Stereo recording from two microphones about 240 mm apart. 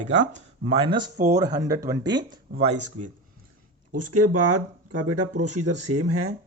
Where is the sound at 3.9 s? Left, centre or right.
Right.